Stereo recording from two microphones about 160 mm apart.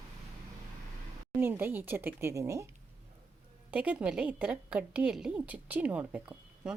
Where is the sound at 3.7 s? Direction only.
10° right (ahead or behind).